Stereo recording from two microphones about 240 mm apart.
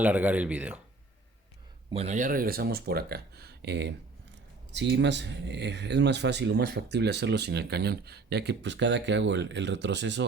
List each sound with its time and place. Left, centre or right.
0.0 s speech: centre
1.9 s speech: right